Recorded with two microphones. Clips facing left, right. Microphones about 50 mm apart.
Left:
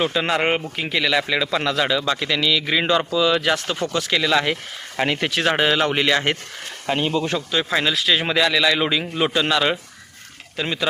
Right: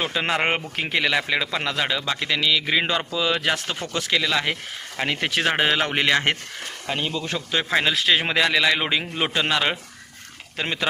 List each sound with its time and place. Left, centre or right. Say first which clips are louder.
0.0 s a man's voice: left 3 dB; right
0.8 s speech: left 1 dB; right
1.0 s a man's voice: left 4 dB; centre
4.1 s speech: left 3 dB; centre
5.0 s speech: left 4 dB; centre
5.3 s a man's voice: even; right
6.8 s speech: left 6 dB; left
7.5 s a man's voice: right 1 dB; right